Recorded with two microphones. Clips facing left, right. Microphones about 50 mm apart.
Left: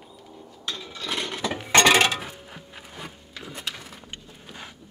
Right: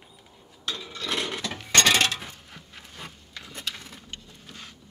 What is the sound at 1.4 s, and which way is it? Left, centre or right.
Chink, centre.